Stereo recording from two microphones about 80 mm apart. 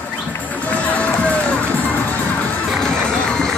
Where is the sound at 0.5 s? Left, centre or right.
Centre.